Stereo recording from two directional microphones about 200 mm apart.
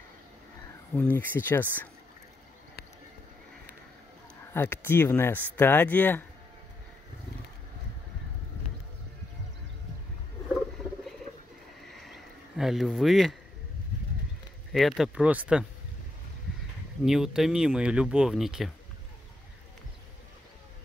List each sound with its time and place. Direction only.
0.9 s speech: 10° left (ahead or behind)
4.6 s speech: 10° left (ahead or behind)
11.9 s a sound: centre (ahead or behind)
14.7 s speech: centre (ahead or behind)
17.0 s speech: centre (ahead or behind)